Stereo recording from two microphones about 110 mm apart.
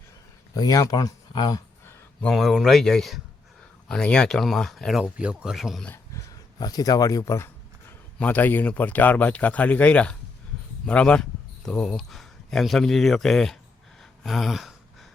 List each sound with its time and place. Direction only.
0.5 s speech: 35° left (ahead or behind)
2.2 s speech: centre (ahead or behind)
6.1 s speech: 35° left (ahead or behind)
8.2 s speech: 15° left (ahead or behind)
14.0 s a sound: centre (ahead or behind)